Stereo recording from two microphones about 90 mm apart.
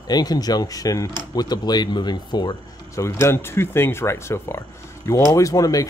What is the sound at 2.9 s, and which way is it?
Speech, 35° left (ahead or behind).